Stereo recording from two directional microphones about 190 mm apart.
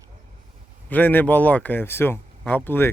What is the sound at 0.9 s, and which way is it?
A man's voice, 10° left (ahead or behind).